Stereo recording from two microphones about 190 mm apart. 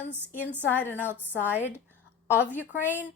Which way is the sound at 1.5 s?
10° right (ahead or behind).